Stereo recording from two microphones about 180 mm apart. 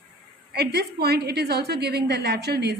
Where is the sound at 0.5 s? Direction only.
65° right (ahead or behind).